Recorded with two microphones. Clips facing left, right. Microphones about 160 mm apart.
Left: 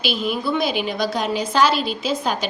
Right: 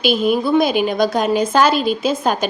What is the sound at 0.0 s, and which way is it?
A woman's voice, 50° right (ahead or behind).